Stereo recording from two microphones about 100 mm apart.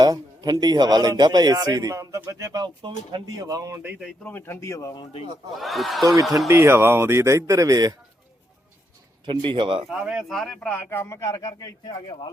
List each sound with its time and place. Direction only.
0.0 s speech: 45° right (ahead or behind)
2.8 s speech: 50° right (ahead or behind)
3.2 s speech: 35° right (ahead or behind)
4.2 s speech: 20° left (ahead or behind)
5.5 s speech: centre (ahead or behind)
6.5 s speech: 25° right (ahead or behind)
9.2 s speech: 55° right (ahead or behind)
10.0 s speech: 5° right (ahead or behind); by 10.8 s 10° left (ahead or behind)
10.8 s speech: 25° left (ahead or behind); by 12.0 s 40° left (ahead or behind)